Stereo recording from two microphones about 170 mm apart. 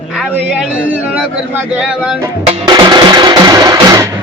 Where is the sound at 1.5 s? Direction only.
5° right (ahead or behind).